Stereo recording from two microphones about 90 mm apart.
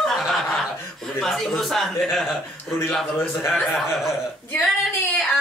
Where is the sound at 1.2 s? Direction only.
5° left (ahead or behind).